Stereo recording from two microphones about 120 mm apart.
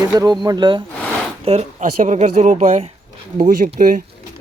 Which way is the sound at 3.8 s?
90° right.